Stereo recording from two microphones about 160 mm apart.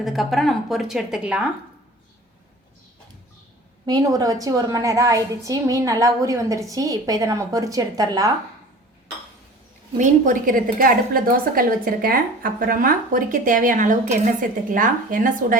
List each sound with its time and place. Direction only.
0.0 s a woman's voice: centre (ahead or behind)
3.8 s a woman's voice: 25° right (ahead or behind)
10.0 s a woman's voice: 55° right (ahead or behind)